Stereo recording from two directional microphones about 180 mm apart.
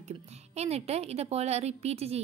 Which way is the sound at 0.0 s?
35° right (ahead or behind).